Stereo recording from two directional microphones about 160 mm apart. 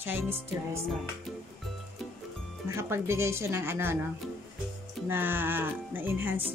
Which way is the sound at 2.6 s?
15° right (ahead or behind).